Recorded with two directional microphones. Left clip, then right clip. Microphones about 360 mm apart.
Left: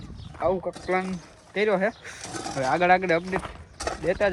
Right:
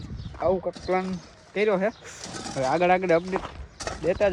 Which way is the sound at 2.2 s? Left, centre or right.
Centre.